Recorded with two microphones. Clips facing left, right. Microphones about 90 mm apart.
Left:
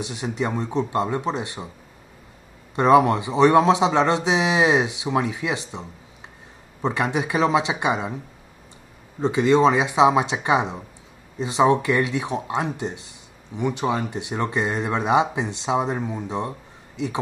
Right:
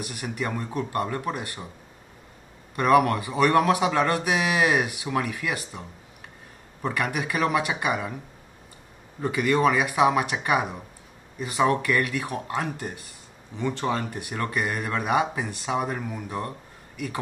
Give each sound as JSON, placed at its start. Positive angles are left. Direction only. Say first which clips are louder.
{"t": 0.0, "sound": "speech", "louder": "left 4 dB", "side_deg": 20}
{"t": 2.7, "sound": "speech", "louder": "left 4 dB", "side_deg": 20}
{"t": 9.2, "sound": "speech", "louder": "left 5 dB", "side_deg": 20}